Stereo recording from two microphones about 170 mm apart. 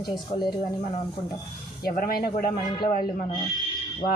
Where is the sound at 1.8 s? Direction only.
60° left (ahead or behind).